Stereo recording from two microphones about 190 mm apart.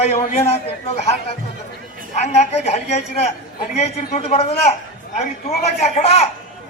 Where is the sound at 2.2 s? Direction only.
35° left (ahead or behind).